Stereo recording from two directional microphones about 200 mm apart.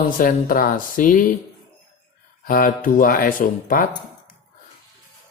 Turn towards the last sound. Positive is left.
turn(degrees=45)  # may be behind; listen again after turning